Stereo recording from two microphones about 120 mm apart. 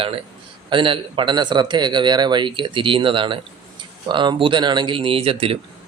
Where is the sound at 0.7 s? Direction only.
45° right (ahead or behind).